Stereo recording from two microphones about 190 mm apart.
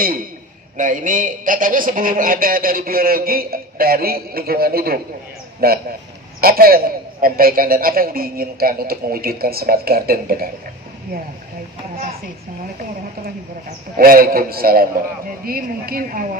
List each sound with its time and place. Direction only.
0.7 s a man's voice: 45° right (ahead or behind)
13.9 s a man's voice: 50° right (ahead or behind)